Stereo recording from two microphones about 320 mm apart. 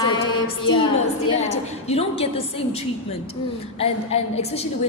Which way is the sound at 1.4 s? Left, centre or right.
Centre.